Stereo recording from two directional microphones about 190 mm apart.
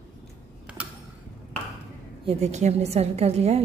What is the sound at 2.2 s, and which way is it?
A woman's voice, 35° right (ahead or behind).